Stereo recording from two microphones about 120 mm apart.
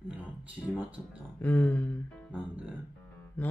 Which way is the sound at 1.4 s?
15° left (ahead or behind).